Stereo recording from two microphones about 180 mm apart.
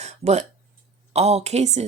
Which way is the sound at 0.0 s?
35° right (ahead or behind).